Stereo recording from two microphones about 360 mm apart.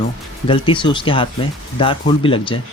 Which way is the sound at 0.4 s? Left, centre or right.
Centre.